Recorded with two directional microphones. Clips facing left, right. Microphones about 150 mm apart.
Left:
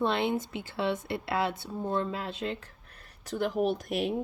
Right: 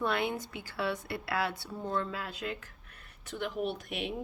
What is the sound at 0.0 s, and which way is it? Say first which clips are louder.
Speech: left 4 dB; 25° left (ahead or behind).